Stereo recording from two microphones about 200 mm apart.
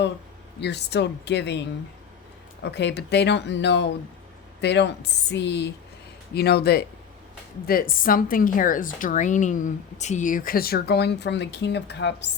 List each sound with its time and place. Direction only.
0.6 s speech: 55° left (ahead or behind)
2.6 s a woman's voice: 55° left (ahead or behind)